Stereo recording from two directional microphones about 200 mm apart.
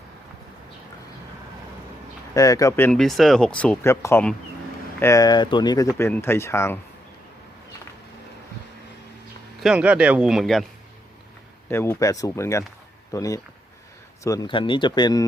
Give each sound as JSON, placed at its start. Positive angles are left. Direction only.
{"t": 2.3, "sound": "speech", "side_deg": 15}
{"t": 9.6, "sound": "speech", "side_deg": -5}
{"t": 11.7, "sound": "speech", "side_deg": 10}